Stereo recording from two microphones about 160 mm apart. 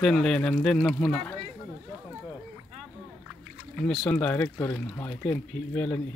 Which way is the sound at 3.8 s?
5° left (ahead or behind).